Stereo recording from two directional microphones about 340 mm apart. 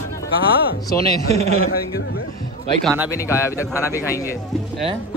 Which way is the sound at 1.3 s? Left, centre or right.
Centre.